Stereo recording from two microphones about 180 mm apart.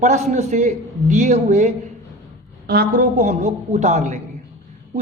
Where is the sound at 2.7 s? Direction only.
60° right (ahead or behind).